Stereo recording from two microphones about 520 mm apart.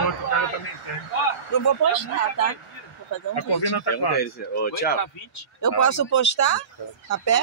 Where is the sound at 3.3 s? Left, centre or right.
Left.